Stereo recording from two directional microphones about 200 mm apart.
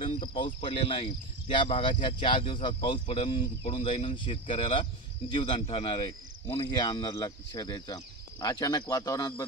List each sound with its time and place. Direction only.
0.0 s cricket: 25° left (ahead or behind)
0.6 s speech: 25° left (ahead or behind)